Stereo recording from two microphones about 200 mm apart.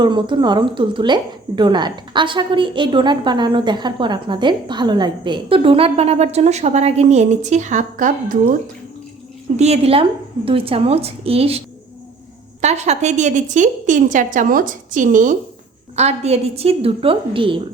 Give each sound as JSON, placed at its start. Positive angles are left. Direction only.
{"t": 0.0, "sound": "a woman's voice", "side_deg": -25}
{"t": 9.6, "sound": "a woman's voice", "side_deg": -30}
{"t": 12.6, "sound": "a woman's voice", "side_deg": -35}